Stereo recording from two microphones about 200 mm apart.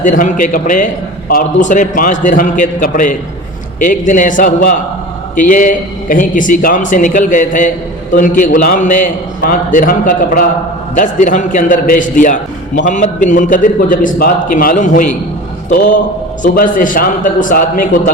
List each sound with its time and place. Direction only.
0.0 s a man's voice: 40° left (ahead or behind)
16.4 s a man's voice: 45° left (ahead or behind)